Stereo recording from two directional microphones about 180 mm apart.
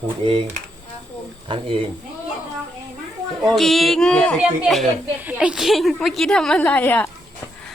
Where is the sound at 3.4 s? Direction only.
Centre (ahead or behind).